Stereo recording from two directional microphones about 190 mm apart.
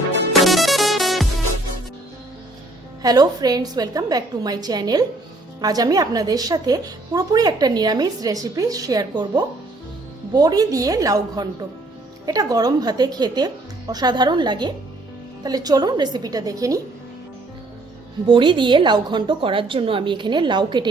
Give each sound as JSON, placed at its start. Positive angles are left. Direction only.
{"t": 0.3, "sound": "music", "side_deg": 0}
{"t": 3.0, "sound": "speech", "side_deg": -20}
{"t": 18.3, "sound": "speech", "side_deg": -25}